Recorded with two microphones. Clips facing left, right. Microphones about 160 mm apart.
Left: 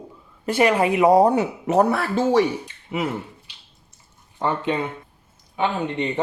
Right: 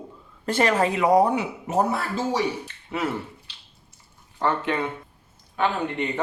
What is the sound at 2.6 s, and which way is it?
Speech, 15° left (ahead or behind).